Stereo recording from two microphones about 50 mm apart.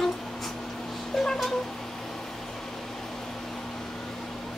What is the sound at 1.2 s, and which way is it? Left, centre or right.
Cat, centre.